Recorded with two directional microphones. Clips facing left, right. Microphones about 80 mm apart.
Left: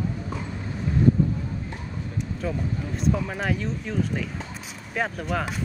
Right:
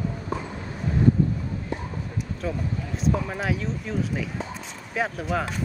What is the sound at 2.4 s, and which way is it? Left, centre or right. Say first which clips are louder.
Speech: even; centre.